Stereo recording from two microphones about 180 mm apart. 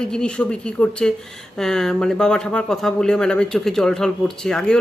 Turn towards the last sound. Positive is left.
turn(degrees=5)  # may be behind; listen again after turning